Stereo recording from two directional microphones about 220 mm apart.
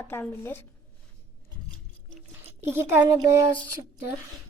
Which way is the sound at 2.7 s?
10° right (ahead or behind).